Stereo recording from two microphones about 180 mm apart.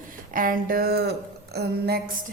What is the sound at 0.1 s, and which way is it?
Speech, 50° right (ahead or behind).